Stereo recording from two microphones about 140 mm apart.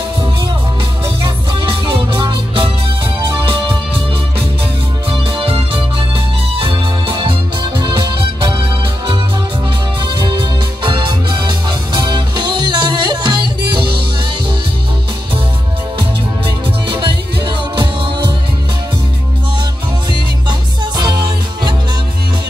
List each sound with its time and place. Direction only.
1.5 s music: 35° right (ahead or behind)
5.1 s organ: 40° right (ahead or behind)
10.2 s music: 35° right (ahead or behind)
16.8 s music: 35° right (ahead or behind)
20.1 s music: 30° right (ahead or behind)